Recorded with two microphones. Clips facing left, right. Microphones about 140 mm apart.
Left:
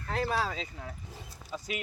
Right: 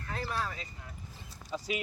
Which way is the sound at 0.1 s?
85° left.